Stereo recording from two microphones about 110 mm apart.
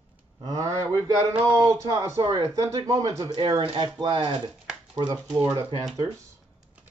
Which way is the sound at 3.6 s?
55° right (ahead or behind).